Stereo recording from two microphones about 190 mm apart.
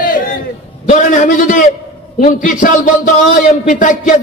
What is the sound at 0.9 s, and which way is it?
Speech, 40° left (ahead or behind).